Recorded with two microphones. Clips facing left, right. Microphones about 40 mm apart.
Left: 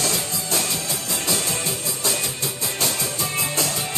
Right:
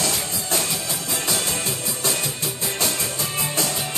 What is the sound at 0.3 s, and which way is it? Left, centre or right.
Music, centre.